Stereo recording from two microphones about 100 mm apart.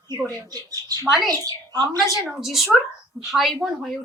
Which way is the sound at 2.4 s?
Centre (ahead or behind).